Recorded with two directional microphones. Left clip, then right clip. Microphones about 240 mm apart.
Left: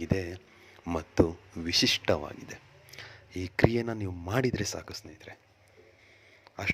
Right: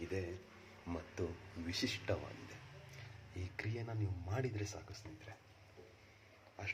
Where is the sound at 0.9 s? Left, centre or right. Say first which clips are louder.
Left 17 dB; left.